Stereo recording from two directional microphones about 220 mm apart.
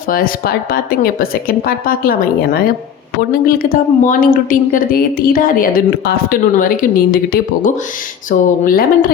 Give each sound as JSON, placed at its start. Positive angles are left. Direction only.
{"t": 0.1, "sound": "a woman's voice", "side_deg": 40}
{"t": 8.3, "sound": "a woman's voice", "side_deg": 40}